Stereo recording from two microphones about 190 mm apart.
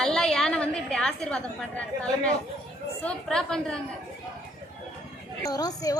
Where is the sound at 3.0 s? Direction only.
5° left (ahead or behind).